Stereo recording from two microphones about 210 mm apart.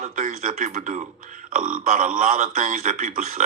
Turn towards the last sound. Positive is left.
turn(degrees=-40)  # may be behind; listen again after turning